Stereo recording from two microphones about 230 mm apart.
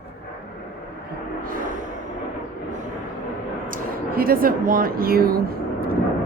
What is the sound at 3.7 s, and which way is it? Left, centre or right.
Speech, right.